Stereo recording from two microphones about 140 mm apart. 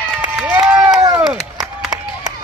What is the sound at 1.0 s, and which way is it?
Chop, 15° right (ahead or behind).